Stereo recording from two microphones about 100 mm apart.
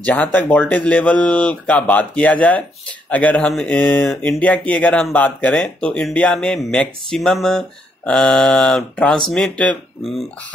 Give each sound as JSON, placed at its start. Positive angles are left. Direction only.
{"t": 0.0, "sound": "speech", "side_deg": 15}